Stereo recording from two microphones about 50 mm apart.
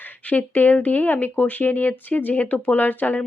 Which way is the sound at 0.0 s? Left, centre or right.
Left.